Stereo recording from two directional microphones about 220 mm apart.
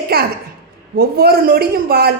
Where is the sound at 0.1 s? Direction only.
40° right (ahead or behind).